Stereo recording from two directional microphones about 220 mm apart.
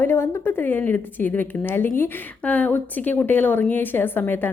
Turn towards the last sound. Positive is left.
turn(degrees=10)  # may be behind; listen again after turning